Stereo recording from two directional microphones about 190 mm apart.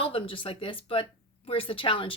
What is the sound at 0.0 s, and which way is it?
A woman's voice, 30° left (ahead or behind).